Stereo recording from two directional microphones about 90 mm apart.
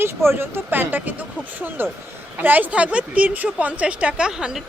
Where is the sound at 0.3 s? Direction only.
25° right (ahead or behind).